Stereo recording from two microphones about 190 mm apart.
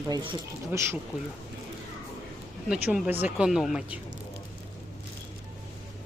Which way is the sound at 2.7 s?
5° right (ahead or behind).